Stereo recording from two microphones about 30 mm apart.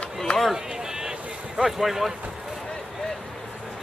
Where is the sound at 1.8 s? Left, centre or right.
Centre.